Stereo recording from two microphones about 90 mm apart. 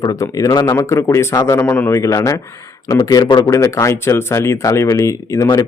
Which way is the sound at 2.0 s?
35° left (ahead or behind).